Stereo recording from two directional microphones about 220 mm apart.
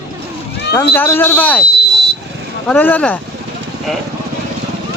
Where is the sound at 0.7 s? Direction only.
10° left (ahead or behind).